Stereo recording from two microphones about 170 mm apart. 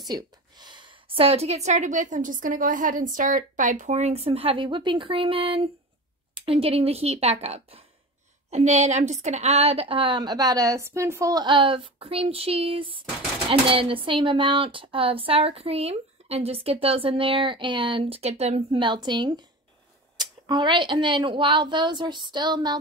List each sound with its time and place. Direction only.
0.0 s a woman's voice: 25° right (ahead or behind)